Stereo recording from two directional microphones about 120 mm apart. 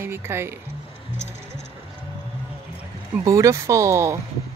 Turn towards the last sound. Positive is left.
turn(degrees=-25)  # may be behind; listen again after turning